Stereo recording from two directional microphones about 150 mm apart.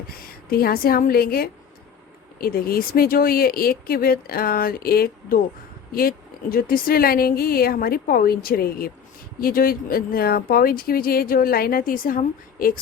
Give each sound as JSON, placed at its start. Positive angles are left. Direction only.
{"t": 0.3, "sound": "speech", "side_deg": 85}